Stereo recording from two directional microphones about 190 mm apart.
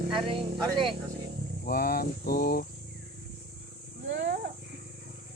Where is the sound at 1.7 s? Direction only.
50° left (ahead or behind).